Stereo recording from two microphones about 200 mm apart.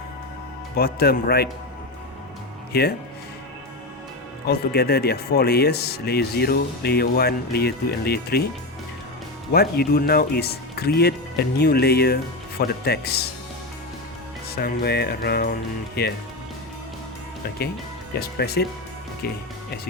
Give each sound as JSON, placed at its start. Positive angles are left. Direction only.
{"t": 0.8, "sound": "speech", "side_deg": 50}
{"t": 2.7, "sound": "speech", "side_deg": 55}
{"t": 4.4, "sound": "speech", "side_deg": 55}
{"t": 9.5, "sound": "speech", "side_deg": 50}
{"t": 14.5, "sound": "speech", "side_deg": 55}
{"t": 18.2, "sound": "speech", "side_deg": 50}